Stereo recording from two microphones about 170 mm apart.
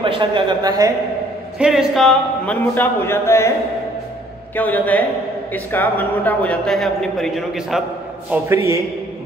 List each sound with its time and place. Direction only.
0.0 s speech: 30° right (ahead or behind)
1.6 s speech: 5° right (ahead or behind); by 3.5 s 15° left (ahead or behind)
4.6 s a man's voice: 10° left (ahead or behind); by 8.5 s 10° right (ahead or behind)